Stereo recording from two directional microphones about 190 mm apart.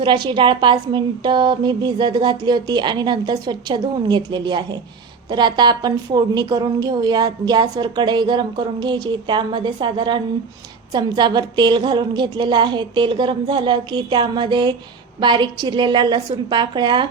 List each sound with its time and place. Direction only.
0.0 s a woman's voice: 25° right (ahead or behind)